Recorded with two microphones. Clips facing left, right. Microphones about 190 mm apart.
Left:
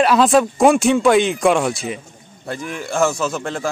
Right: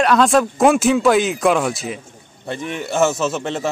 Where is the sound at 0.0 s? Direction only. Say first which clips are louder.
Left 1 dB; centre (ahead or behind).